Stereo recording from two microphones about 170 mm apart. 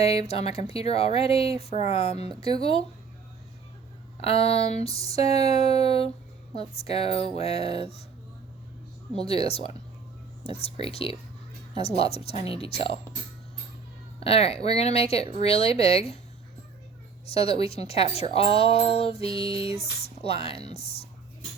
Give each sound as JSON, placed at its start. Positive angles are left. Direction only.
{"t": 0.3, "sound": "a woman's voice", "side_deg": 35}
{"t": 4.2, "sound": "a woman's voice", "side_deg": 35}
{"t": 9.1, "sound": "a woman's voice", "side_deg": 35}
{"t": 14.2, "sound": "a woman's voice", "side_deg": 35}
{"t": 17.3, "sound": "a woman's voice", "side_deg": 35}